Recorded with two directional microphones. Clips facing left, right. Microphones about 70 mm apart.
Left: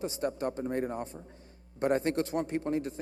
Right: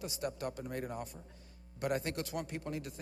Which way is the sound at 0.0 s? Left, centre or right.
Left.